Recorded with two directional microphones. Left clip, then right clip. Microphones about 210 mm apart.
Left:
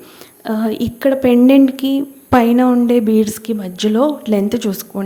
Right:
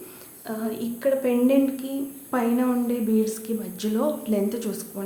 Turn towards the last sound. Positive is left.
turn(degrees=40)  # may be behind; listen again after turning